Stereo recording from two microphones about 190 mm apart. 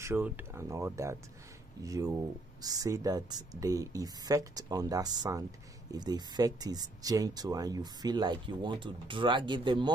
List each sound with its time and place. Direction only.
0.0 s speech: 10° right (ahead or behind)